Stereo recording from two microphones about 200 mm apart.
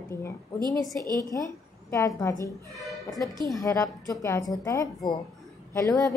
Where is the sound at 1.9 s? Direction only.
15° left (ahead or behind).